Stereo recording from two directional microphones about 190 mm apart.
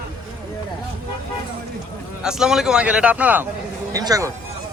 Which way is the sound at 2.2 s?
5° right (ahead or behind).